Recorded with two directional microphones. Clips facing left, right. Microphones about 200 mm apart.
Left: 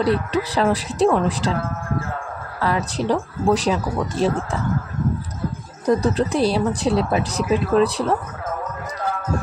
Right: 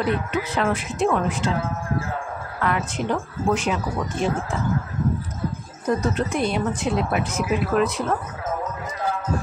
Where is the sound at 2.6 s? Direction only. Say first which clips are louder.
Left 3 dB; 35° left (ahead or behind).